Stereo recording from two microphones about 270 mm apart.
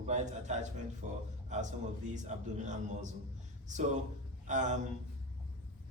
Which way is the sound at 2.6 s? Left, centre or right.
Right.